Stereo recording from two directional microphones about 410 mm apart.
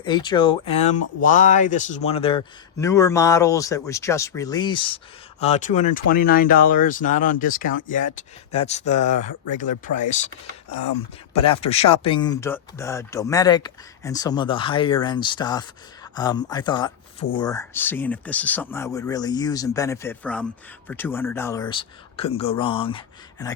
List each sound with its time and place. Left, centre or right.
0.0 s speech: centre
10.7 s speech: left
11.4 s speech: centre